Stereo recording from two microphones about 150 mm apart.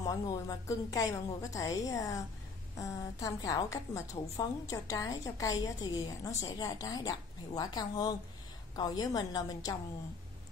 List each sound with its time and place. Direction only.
0.0 s a woman's voice: 25° left (ahead or behind)